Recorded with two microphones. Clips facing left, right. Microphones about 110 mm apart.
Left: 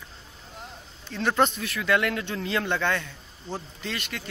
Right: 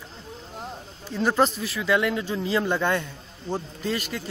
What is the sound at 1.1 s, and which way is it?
Speech, 5° right (ahead or behind).